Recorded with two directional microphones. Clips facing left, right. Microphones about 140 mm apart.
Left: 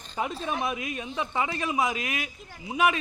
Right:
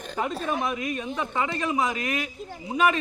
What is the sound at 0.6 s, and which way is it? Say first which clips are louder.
Speech: right 3 dB; 10° left (ahead or behind).